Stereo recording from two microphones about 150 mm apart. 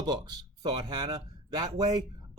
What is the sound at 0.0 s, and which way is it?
Speech, 25° right (ahead or behind).